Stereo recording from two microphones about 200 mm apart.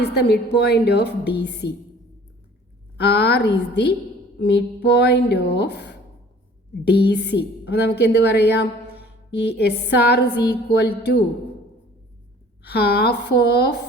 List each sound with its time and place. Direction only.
0.0 s a woman's voice: 55° left (ahead or behind)
3.0 s a woman's voice: 55° left (ahead or behind)
12.6 s a woman's voice: 55° left (ahead or behind)